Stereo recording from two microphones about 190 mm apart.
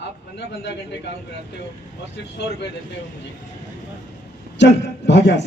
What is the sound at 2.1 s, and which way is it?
Speech, 65° left (ahead or behind).